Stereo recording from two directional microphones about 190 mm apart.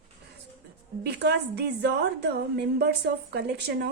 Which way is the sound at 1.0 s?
60° right (ahead or behind).